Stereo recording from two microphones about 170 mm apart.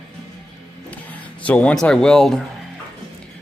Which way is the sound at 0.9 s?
10° left (ahead or behind).